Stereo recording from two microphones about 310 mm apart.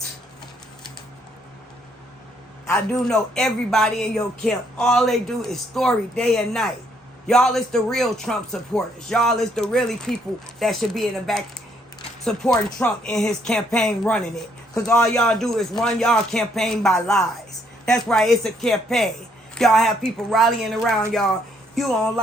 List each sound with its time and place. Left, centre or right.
2.6 s speech: centre